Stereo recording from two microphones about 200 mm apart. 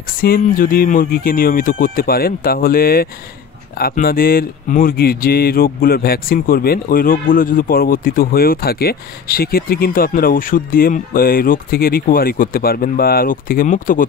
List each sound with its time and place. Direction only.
0.2 s speech: 45° left (ahead or behind)